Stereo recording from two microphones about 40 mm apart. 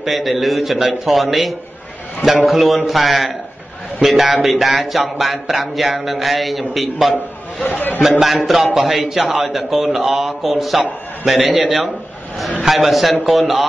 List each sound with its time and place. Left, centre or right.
0.0 s a man's voice: centre
7.6 s a man's voice: left
8.2 s a man's voice: centre
12.6 s a man's voice: centre